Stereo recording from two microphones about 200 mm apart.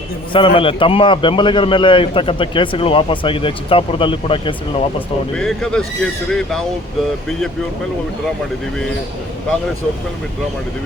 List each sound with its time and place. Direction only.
0.3 s a man's voice: 25° left (ahead or behind)
5.4 s speech: 5° left (ahead or behind)